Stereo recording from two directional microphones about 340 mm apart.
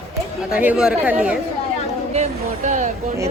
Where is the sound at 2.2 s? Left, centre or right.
Right.